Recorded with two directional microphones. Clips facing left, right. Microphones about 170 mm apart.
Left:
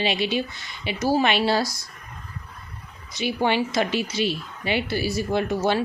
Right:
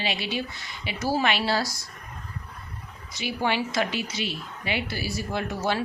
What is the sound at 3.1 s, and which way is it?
A woman's voice, 25° left (ahead or behind).